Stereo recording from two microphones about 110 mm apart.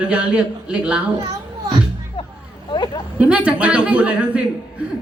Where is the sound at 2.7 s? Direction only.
40° left (ahead or behind).